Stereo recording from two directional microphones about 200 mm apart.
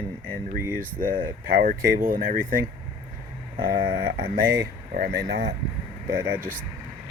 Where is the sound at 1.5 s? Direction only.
45° right (ahead or behind).